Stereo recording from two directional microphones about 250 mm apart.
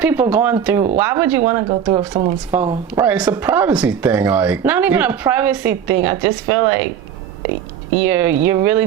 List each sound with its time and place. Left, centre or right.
0.0 s speech: centre
2.6 s speech: centre
8.0 s speech: centre